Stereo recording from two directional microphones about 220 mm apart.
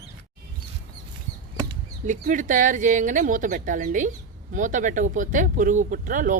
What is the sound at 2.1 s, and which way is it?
Speech, 35° right (ahead or behind).